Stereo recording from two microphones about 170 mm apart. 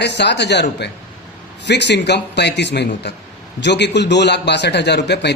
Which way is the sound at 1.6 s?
90° left.